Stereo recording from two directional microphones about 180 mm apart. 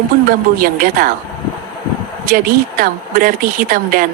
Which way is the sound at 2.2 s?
50° right (ahead or behind).